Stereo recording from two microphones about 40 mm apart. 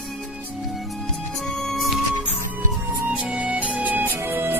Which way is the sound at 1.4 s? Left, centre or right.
Centre.